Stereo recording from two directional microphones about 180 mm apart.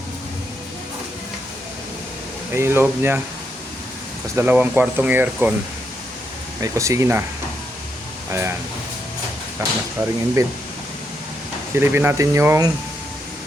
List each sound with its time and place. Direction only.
2.5 s speech: 15° right (ahead or behind)
4.4 s speech: 10° right (ahead or behind)
6.6 s speech: 15° right (ahead or behind)
8.3 s speech: 15° right (ahead or behind)
9.6 s speech: 15° right (ahead or behind)
11.7 s speech: 10° right (ahead or behind)